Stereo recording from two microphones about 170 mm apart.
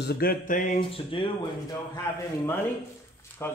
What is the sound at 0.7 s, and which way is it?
Speech, 30° left (ahead or behind).